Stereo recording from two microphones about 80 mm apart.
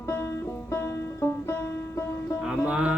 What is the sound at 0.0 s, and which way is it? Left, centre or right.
Music, left.